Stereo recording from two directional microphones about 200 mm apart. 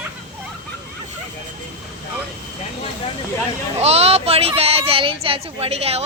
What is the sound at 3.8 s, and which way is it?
Speech, 30° right (ahead or behind).